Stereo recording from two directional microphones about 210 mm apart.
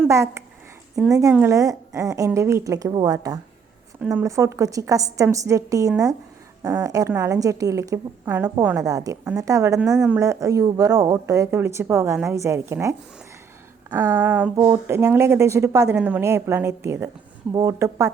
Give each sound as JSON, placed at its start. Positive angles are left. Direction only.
{"t": 0.0, "sound": "speech", "side_deg": -10}